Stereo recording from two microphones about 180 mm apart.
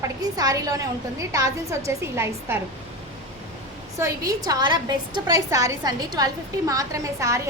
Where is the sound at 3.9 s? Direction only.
15° right (ahead or behind).